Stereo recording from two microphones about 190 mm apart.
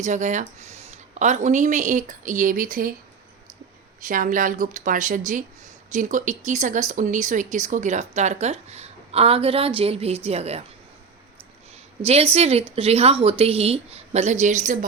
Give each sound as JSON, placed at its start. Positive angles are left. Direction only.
{"t": 0.0, "sound": "speech", "side_deg": -40}
{"t": 4.1, "sound": "a woman's voice", "side_deg": -45}
{"t": 12.0, "sound": "speech", "side_deg": -35}